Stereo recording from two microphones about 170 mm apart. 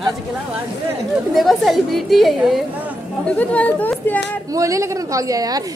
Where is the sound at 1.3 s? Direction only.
Centre (ahead or behind).